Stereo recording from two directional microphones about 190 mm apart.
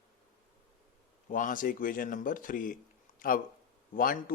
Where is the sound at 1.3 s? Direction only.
45° left (ahead or behind).